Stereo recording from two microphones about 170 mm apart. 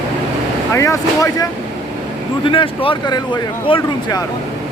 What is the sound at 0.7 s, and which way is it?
Speech, 15° left (ahead or behind).